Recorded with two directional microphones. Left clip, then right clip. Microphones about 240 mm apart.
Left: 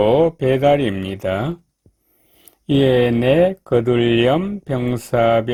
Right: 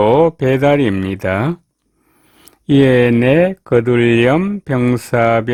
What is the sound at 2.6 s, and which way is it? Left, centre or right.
Speech, right.